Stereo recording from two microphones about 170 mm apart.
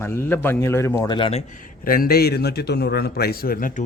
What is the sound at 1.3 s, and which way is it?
A man's voice, 45° left (ahead or behind).